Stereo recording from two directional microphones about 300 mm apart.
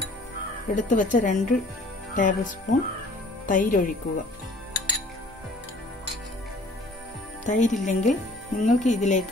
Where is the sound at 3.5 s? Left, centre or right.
Left.